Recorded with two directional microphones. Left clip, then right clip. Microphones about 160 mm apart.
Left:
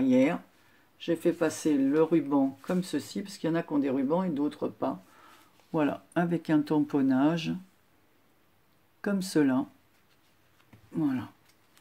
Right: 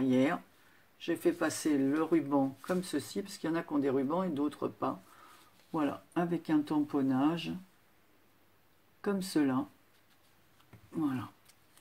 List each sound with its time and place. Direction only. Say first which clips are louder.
0.0 s speech: left 5 dB; 25° left (ahead or behind)
9.0 s speech: left 4 dB; 25° left (ahead or behind)
10.9 s speech: left 4 dB; 25° left (ahead or behind)